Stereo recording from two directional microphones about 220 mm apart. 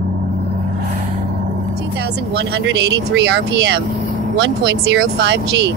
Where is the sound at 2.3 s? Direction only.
50° right (ahead or behind).